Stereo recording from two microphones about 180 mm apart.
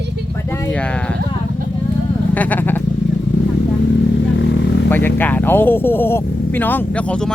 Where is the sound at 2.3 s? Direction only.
10° left (ahead or behind).